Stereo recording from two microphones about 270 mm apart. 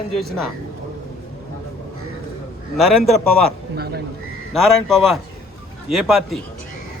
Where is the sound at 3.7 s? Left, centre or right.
Right.